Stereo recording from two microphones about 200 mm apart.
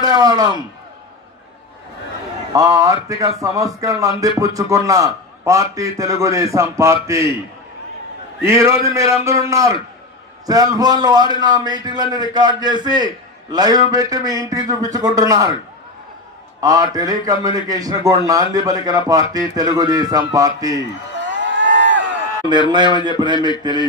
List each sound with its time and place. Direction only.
0.0 s a man's voice: 20° right (ahead or behind)
2.5 s a man's voice: 15° right (ahead or behind)
8.4 s a man's voice: 15° right (ahead or behind)
16.6 s a man's voice: 20° right (ahead or behind)
21.2 s a sound: 65° right (ahead or behind)
22.4 s a man's voice: 20° left (ahead or behind)
23.0 s a man's voice: 20° right (ahead or behind)